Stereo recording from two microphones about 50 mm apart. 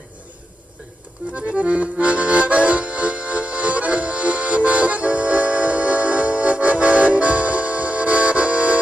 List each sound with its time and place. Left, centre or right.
1.3 s accordion: right